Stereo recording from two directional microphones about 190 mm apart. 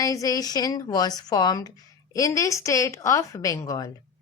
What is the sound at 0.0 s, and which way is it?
A woman's voice, 20° left (ahead or behind).